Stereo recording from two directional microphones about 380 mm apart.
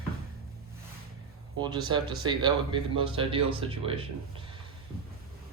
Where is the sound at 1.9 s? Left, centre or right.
Centre.